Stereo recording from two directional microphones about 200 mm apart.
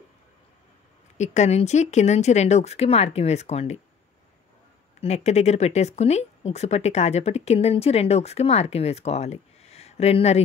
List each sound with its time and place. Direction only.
1.1 s speech: 35° left (ahead or behind)
5.0 s speech: 35° left (ahead or behind)